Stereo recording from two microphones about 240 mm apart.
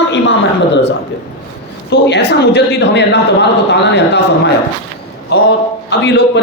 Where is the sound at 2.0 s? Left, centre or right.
Left.